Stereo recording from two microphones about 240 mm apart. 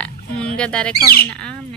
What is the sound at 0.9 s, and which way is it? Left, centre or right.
Speech, left.